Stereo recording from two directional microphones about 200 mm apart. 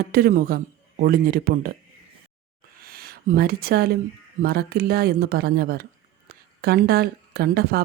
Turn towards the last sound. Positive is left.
turn(degrees=-50)  # may be behind; listen again after turning